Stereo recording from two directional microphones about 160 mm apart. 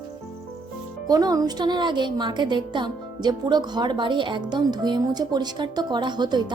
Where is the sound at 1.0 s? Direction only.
25° right (ahead or behind).